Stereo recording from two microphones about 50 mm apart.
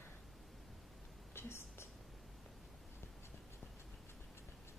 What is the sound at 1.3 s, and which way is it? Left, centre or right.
Whispering, left.